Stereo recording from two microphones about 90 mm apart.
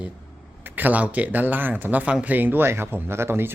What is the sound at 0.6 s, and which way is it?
Speech, 20° right (ahead or behind).